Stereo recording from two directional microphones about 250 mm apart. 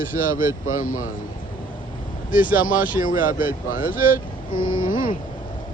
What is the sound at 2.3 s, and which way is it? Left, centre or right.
Speech, left.